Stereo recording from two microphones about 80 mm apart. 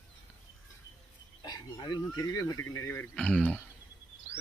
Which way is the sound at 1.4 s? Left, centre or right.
Left.